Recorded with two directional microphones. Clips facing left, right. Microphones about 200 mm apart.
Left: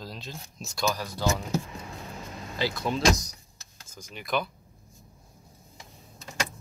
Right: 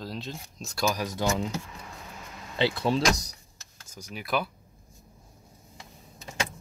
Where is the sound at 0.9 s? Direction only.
20° right (ahead or behind).